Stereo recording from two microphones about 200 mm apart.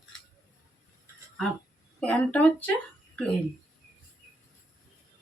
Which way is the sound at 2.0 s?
5° left (ahead or behind).